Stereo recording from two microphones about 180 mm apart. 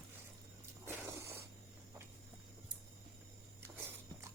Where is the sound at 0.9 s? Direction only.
15° right (ahead or behind).